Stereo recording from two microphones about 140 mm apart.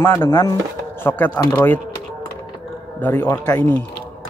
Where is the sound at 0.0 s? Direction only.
20° left (ahead or behind).